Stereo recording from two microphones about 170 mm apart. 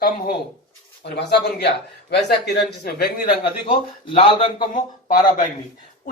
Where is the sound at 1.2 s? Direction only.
80° left.